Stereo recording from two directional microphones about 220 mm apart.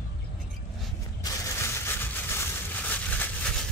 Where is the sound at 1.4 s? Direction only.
10° left (ahead or behind).